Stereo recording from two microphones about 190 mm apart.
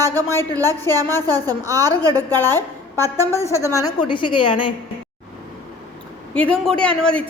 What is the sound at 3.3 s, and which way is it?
A woman's voice, 15° left (ahead or behind).